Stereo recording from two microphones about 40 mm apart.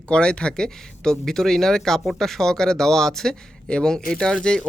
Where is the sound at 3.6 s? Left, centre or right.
Left.